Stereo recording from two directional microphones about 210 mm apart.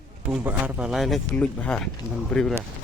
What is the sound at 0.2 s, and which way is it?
Speech, 5° right (ahead or behind).